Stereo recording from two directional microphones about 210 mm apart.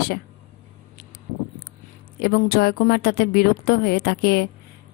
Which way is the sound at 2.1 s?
50° left (ahead or behind).